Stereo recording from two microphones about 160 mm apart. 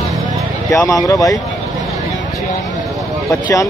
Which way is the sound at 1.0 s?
20° left (ahead or behind).